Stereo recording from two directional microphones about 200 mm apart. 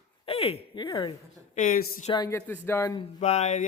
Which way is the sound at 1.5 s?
45° left (ahead or behind).